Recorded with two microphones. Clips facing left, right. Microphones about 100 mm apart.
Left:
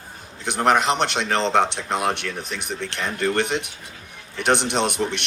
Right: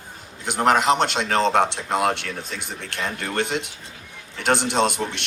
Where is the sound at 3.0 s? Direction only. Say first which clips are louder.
Left 3 dB; 20° right (ahead or behind).